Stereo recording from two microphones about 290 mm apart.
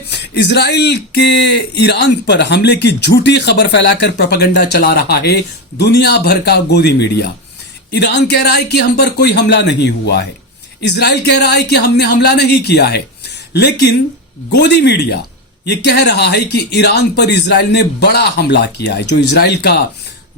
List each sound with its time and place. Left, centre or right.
0.1 s speech: left